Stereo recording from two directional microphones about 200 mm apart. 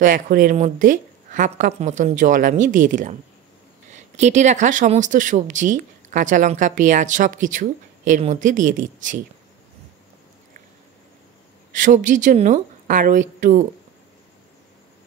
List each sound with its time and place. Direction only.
0.0 s speech: 45° right (ahead or behind)
11.7 s speech: 40° right (ahead or behind)